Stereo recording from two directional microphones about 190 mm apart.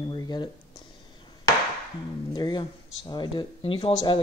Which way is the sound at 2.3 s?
20° left (ahead or behind).